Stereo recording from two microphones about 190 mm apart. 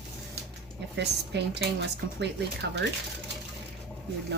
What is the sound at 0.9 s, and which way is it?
Speech, 65° right (ahead or behind).